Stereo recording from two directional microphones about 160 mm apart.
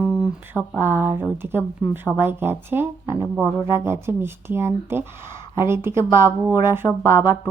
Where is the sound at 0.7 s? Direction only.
15° left (ahead or behind).